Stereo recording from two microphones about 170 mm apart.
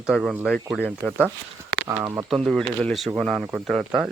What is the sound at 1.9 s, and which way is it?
Speech, 20° right (ahead or behind).